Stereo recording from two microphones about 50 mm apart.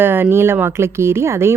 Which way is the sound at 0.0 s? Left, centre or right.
Right.